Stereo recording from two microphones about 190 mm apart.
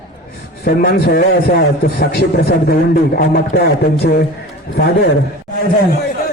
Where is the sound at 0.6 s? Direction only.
55° left (ahead or behind).